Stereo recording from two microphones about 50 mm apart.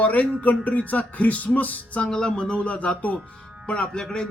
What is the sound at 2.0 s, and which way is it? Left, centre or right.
Speech, centre.